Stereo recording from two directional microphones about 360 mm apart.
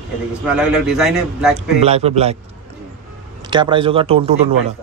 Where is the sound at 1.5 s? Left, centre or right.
Centre.